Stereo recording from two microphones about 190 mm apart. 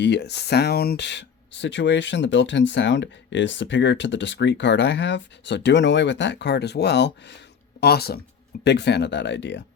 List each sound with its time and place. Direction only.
0.0 s speech: 60° left (ahead or behind)